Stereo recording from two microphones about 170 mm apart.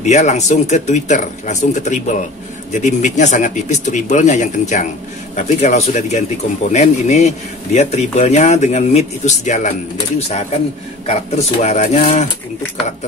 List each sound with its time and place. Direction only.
0.0 s speech: 45° left (ahead or behind)